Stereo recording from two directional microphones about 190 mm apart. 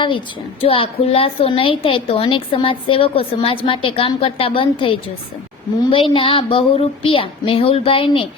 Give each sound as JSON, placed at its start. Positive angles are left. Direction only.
{"t": 0.6, "sound": "a woman's voice", "side_deg": 30}